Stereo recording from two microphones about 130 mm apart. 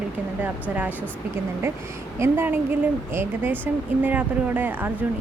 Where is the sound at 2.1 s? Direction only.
20° right (ahead or behind).